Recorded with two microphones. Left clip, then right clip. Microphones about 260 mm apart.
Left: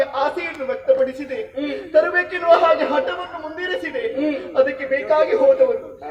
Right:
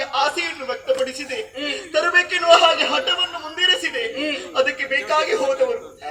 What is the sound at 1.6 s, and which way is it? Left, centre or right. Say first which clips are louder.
Chuckle: left 3 dB; right.